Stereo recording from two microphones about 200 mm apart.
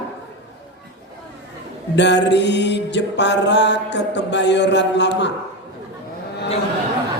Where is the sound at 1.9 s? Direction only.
60° left (ahead or behind).